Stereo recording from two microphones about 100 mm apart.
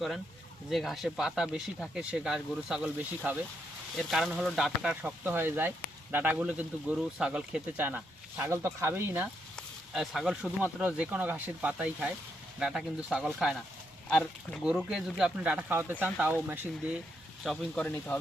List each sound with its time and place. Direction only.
0.7 s speech: centre (ahead or behind)
3.9 s speech: 5° right (ahead or behind); by 9.2 s 20° right (ahead or behind)
9.9 s speech: 5° right (ahead or behind)
14.1 s speech: 10° left (ahead or behind)
14.6 s speech: 5° right (ahead or behind)
17.4 s speech: centre (ahead or behind)
17.7 s speech: 15° left (ahead or behind)